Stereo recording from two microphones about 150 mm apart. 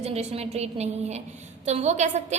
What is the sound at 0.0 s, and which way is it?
A woman's voice, 45° right (ahead or behind).